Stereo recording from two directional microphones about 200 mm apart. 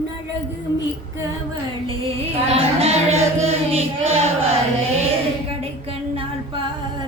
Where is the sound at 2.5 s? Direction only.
30° right (ahead or behind).